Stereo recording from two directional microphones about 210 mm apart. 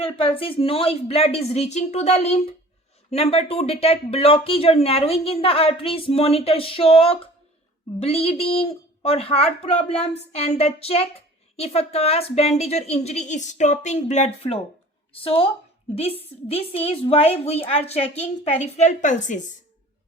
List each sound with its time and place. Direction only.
0.0 s a woman's voice: 25° left (ahead or behind)